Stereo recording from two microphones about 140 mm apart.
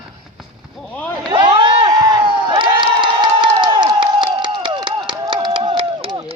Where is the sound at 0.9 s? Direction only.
10° left (ahead or behind).